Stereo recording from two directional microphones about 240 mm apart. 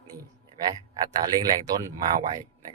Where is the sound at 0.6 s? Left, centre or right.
Centre.